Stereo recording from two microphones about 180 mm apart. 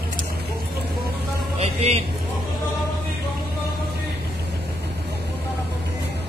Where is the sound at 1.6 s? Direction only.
35° right (ahead or behind).